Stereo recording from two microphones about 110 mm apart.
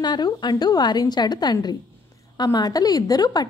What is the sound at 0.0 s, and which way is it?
A woman's voice, 40° left (ahead or behind).